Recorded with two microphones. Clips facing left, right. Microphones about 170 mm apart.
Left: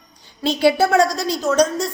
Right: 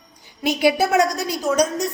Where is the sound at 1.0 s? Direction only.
30° left (ahead or behind).